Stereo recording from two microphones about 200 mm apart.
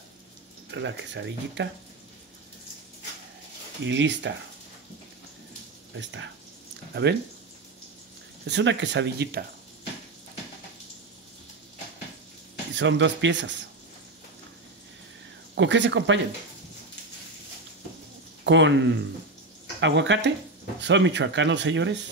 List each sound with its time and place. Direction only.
0.7 s speech: 65° right (ahead or behind)
3.8 s speech: 65° right (ahead or behind)
5.9 s speech: 65° right (ahead or behind)
8.5 s speech: 60° right (ahead or behind)
12.7 s speech: 65° right (ahead or behind)
15.5 s speech: 65° right (ahead or behind)
18.4 s speech: 65° right (ahead or behind)